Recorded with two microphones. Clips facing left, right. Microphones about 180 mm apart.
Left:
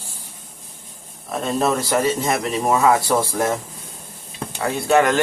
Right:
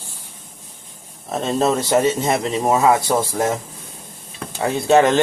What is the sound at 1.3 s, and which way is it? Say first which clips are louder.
Speech: right 2 dB; 25° right (ahead or behind).